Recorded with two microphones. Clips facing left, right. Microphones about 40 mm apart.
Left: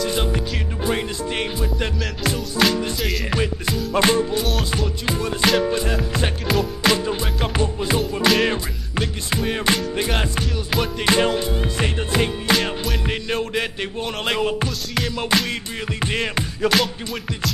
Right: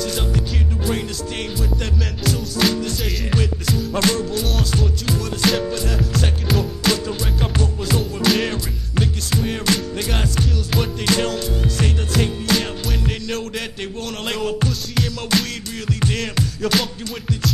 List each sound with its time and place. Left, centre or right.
0.0 s music: left
3.9 s music: left
6.4 s music: centre
6.8 s music: left
8.3 s music: centre
9.7 s music: left
10.4 s music: centre
11.1 s music: left